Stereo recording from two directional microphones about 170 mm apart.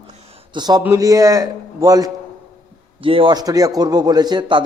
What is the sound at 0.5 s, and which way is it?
A man's voice, 25° right (ahead or behind).